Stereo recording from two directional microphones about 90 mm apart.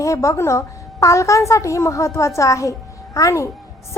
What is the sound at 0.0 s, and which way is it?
A woman's voice, 35° left (ahead or behind).